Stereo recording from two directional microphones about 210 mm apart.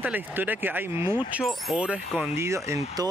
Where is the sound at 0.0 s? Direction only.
10° right (ahead or behind).